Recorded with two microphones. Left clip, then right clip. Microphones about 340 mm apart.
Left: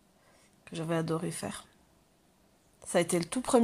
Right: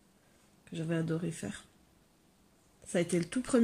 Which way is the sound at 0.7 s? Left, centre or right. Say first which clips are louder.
Left 3 dB; centre.